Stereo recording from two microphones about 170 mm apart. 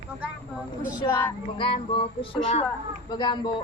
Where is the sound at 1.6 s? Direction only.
30° left (ahead or behind).